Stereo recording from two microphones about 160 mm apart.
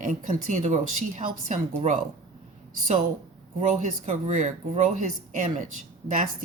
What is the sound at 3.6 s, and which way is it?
A woman's voice, 50° right (ahead or behind).